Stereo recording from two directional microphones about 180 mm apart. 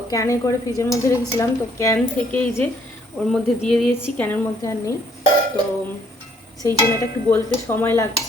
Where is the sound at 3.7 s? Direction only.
5° left (ahead or behind).